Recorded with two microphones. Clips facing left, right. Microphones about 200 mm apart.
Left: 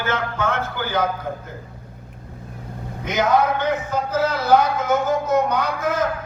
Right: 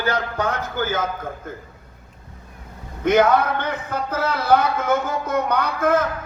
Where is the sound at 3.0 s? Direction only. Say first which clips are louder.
Right 3 dB; 55° right (ahead or behind).